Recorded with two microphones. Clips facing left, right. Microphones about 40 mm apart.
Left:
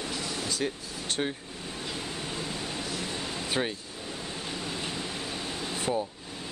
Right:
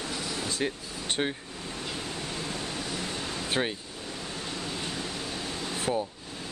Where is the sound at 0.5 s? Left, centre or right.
Right.